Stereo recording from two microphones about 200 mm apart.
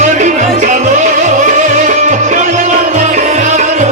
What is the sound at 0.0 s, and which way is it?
Music, 35° right (ahead or behind).